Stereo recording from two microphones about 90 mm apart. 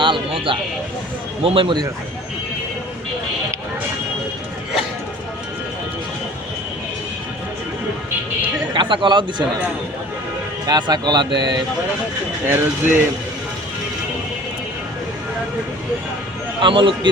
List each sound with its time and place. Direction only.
0.0 s a sound: 70° right (ahead or behind)
1.5 s speech: 80° right
8.7 s a man's voice: 60° right (ahead or behind)
10.7 s speech: 50° right (ahead or behind)
12.5 s speech: 25° right (ahead or behind)
16.6 s speech: 70° right (ahead or behind)